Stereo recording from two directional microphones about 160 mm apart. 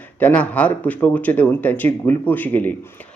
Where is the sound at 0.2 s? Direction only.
10° left (ahead or behind).